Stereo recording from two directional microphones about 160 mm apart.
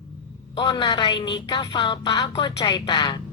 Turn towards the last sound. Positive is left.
turn(degrees=30)  # may be behind; listen again after turning